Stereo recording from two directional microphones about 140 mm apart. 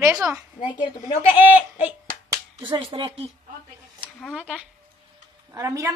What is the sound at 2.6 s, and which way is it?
Speech, 35° right (ahead or behind).